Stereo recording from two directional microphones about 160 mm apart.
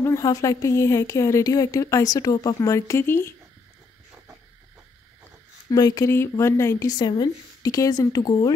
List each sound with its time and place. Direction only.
0.0 s speech: 20° left (ahead or behind)
5.7 s speech: 20° left (ahead or behind)